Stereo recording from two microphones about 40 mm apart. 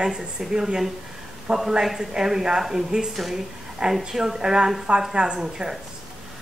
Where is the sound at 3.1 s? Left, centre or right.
Centre.